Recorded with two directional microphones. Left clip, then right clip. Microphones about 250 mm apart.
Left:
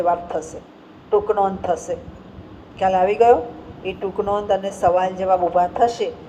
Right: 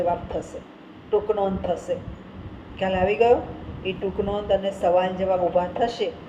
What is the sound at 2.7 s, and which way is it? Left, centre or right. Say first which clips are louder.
Speech: left 5 dB; left.